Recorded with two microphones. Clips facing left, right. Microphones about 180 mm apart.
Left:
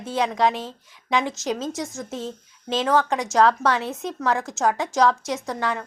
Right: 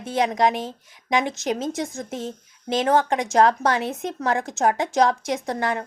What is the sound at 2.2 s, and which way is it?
A woman's voice, 15° right (ahead or behind).